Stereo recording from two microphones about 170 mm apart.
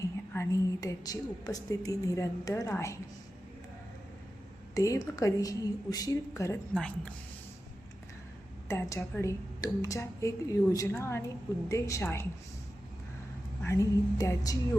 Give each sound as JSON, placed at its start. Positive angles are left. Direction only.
{"t": 0.3, "sound": "a woman's voice", "side_deg": 20}
{"t": 4.7, "sound": "a woman's voice", "side_deg": 20}
{"t": 6.7, "sound": "speech", "side_deg": 5}
{"t": 8.6, "sound": "a woman's voice", "side_deg": 15}
{"t": 13.6, "sound": "a woman's voice", "side_deg": 15}